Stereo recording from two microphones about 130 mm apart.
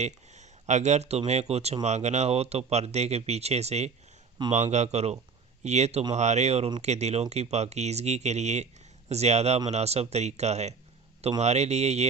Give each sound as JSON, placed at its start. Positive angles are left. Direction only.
{"t": 0.0, "sound": "speech", "side_deg": -60}